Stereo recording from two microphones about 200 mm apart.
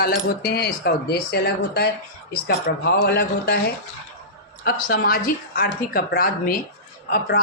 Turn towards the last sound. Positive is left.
turn(degrees=50)  # may be behind; listen again after turning